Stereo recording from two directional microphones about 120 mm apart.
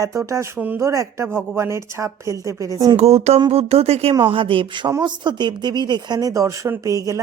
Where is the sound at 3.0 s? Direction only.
60° right (ahead or behind).